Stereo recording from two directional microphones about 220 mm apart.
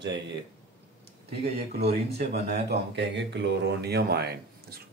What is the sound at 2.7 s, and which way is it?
Speech, 50° right (ahead or behind).